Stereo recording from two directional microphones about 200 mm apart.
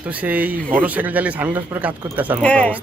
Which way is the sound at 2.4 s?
5° left (ahead or behind).